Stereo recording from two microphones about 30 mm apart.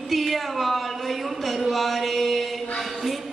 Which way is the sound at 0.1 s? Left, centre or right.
Centre.